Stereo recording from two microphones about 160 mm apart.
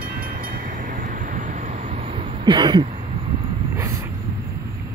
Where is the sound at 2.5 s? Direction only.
30° right (ahead or behind).